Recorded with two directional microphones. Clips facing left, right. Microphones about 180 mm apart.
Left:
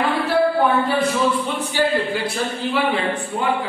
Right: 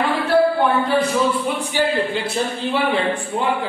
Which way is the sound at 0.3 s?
Centre (ahead or behind).